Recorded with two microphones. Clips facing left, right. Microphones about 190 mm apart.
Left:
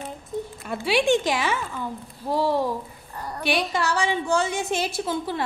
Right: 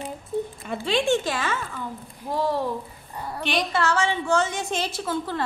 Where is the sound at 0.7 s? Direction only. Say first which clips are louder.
Left 3 dB; 10° left (ahead or behind).